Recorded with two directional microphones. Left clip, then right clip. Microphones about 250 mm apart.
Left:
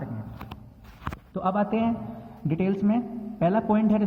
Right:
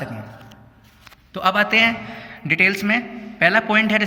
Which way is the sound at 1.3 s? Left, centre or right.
Right.